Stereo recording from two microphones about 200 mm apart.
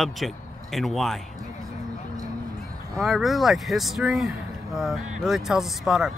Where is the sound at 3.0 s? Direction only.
Centre (ahead or behind).